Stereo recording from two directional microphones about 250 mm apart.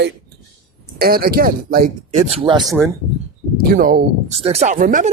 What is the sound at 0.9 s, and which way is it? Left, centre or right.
Speech, right.